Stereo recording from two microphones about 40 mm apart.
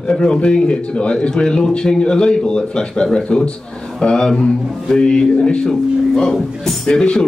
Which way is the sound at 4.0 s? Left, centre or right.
Centre.